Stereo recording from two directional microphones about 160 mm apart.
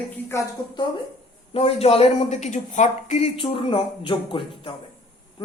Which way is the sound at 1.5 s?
35° left (ahead or behind).